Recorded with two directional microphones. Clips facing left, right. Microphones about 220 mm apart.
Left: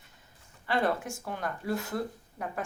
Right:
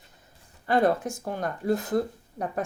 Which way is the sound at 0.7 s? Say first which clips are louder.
Right 6 dB; 40° right (ahead or behind).